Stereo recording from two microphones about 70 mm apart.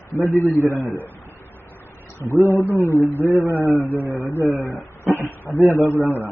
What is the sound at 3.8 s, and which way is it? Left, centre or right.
Speech, left.